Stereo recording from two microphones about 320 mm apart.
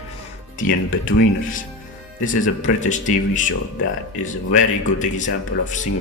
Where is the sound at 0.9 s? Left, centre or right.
Left.